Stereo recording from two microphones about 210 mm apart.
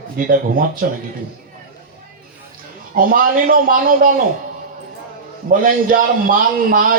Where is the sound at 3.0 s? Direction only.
40° right (ahead or behind).